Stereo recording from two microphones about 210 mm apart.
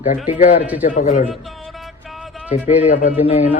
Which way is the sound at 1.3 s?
Centre (ahead or behind).